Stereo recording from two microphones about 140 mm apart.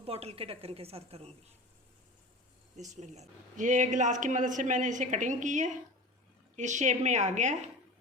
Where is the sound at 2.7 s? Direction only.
55° right (ahead or behind).